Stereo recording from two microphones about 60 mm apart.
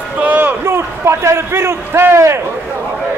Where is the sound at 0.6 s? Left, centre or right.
Right.